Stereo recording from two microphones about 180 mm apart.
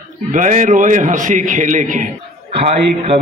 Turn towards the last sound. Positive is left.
turn(degrees=-35)  # may be behind; listen again after turning